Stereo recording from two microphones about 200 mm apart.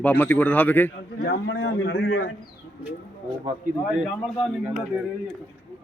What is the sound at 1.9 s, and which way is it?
Speech, 65° left (ahead or behind).